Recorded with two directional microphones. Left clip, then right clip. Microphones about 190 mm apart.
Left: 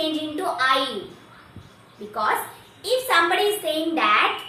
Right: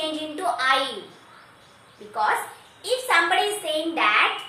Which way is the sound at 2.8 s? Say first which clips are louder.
Left 1 dB; 15° right (ahead or behind).